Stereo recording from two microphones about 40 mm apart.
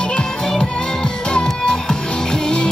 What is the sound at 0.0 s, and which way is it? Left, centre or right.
Music, left.